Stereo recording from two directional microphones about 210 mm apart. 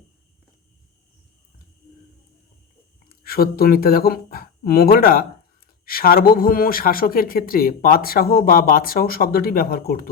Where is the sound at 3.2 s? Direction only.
45° left (ahead or behind).